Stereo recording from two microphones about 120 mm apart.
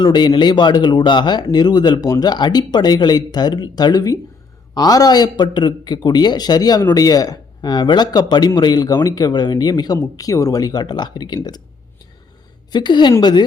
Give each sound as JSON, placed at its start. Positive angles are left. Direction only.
{"t": 0.0, "sound": "speech", "side_deg": 40}
{"t": 12.7, "sound": "speech", "side_deg": 40}